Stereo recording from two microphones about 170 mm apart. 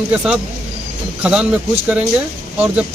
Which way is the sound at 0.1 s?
5° right (ahead or behind).